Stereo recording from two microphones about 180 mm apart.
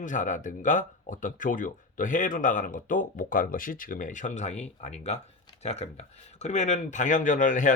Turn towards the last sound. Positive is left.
turn(degrees=45)  # may be behind; listen again after turning